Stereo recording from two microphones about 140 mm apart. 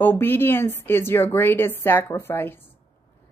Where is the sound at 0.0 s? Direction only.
15° left (ahead or behind).